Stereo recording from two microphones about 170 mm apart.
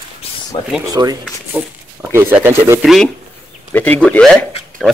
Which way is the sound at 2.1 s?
15° right (ahead or behind).